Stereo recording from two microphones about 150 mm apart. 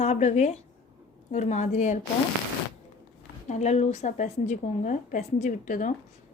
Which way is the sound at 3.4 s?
50° left (ahead or behind).